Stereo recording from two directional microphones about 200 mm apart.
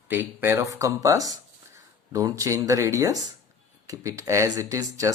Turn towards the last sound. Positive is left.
turn(degrees=-15)  # may be behind; listen again after turning